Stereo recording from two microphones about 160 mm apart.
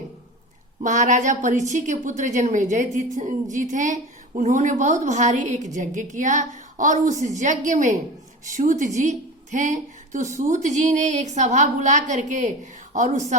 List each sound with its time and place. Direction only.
0.8 s a woman's voice: 50° right (ahead or behind)